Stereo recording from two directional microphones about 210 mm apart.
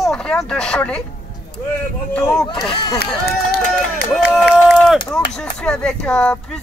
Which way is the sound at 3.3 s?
45° left (ahead or behind).